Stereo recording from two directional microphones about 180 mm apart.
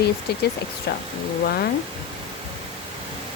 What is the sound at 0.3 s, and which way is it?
Speech, 65° left (ahead or behind).